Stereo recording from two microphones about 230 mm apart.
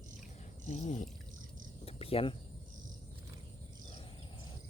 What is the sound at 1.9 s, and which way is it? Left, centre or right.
Cricket, left.